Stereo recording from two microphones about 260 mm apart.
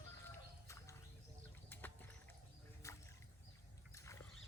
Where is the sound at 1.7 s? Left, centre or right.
Centre.